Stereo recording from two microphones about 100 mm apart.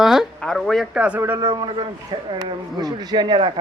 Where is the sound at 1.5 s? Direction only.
50° right (ahead or behind).